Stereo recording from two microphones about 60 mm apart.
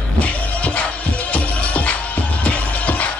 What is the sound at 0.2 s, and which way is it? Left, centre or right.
Music, left.